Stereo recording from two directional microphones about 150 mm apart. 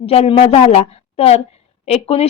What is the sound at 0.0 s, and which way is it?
A woman's voice, 40° left (ahead or behind).